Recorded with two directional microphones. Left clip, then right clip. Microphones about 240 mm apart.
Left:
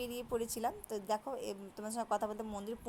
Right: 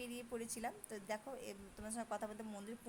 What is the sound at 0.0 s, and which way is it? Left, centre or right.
A woman's voice, centre.